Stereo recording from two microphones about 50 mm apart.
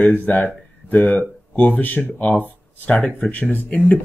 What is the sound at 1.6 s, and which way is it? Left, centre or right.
Speech, left.